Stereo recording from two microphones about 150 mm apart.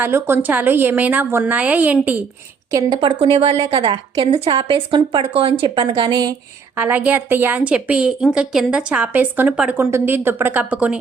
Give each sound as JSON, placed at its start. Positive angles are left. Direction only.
{"t": 0.0, "sound": "a woman's voice", "side_deg": -15}
{"t": 2.7, "sound": "a woman's voice", "side_deg": -30}
{"t": 6.7, "sound": "a woman's voice", "side_deg": -10}